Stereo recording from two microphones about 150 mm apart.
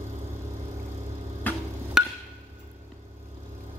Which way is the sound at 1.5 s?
10° left (ahead or behind).